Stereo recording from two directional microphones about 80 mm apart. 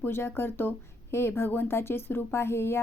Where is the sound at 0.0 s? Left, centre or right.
Left.